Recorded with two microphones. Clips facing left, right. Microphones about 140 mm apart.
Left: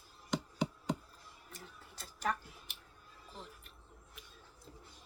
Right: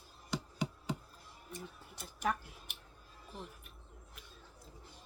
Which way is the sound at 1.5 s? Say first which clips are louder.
Right 6 dB; 15° right (ahead or behind).